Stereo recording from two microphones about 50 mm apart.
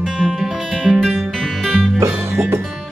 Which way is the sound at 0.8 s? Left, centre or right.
Centre.